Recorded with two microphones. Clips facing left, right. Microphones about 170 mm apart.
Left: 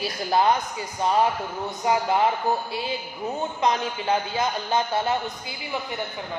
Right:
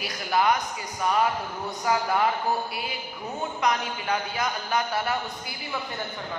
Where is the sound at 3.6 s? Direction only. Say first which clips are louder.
Left 2 dB; 25° left (ahead or behind).